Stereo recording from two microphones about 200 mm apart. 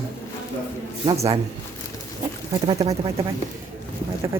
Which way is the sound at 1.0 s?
30° right (ahead or behind).